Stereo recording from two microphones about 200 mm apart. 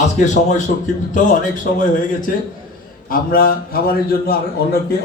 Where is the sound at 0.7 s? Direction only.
40° left (ahead or behind).